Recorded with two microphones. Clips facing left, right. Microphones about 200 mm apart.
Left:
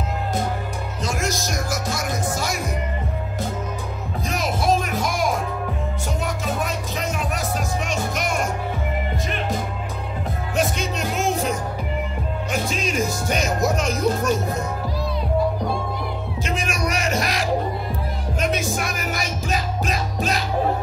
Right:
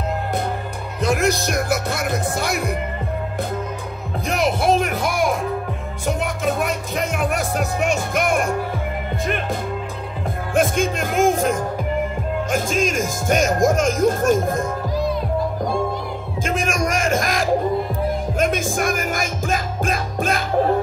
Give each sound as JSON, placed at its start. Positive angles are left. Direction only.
{"t": 1.0, "sound": "speech", "side_deg": -60}
{"t": 4.3, "sound": "music", "side_deg": -60}
{"t": 7.2, "sound": "music", "side_deg": -55}
{"t": 10.5, "sound": "music", "side_deg": -50}
{"t": 16.4, "sound": "music", "side_deg": -50}